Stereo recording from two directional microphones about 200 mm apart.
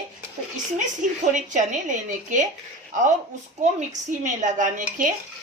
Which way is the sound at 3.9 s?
40° right (ahead or behind).